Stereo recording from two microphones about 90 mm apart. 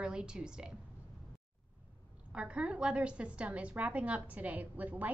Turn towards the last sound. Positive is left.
turn(degrees=-20)  # may be behind; listen again after turning